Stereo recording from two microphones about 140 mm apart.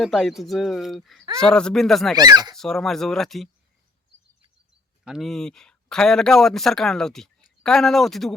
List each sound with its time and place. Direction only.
0.0 s speech: centre (ahead or behind)
2.1 s speech: 30° right (ahead or behind)
2.6 s speech: 5° left (ahead or behind)
5.0 s speech: centre (ahead or behind)